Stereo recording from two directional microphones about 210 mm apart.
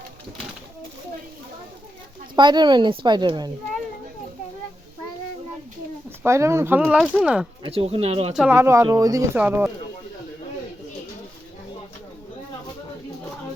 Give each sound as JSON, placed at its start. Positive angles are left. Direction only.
{"t": 2.3, "sound": "a woman's voice", "side_deg": -20}
{"t": 6.2, "sound": "speech", "side_deg": -15}
{"t": 7.6, "sound": "a woman's voice", "side_deg": -25}
{"t": 8.4, "sound": "speech", "side_deg": -10}